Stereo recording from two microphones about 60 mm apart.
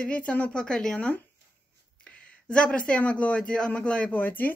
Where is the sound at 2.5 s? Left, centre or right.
Centre.